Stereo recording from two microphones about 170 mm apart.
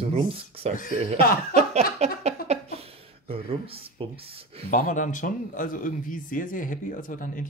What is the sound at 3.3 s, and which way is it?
Speech, 35° right (ahead or behind).